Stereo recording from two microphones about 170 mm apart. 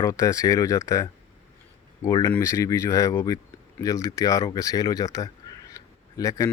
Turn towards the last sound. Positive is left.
turn(degrees=20)  # may be behind; listen again after turning